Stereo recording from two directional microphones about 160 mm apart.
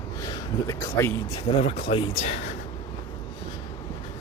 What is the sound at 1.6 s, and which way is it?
Speech, 40° left (ahead or behind).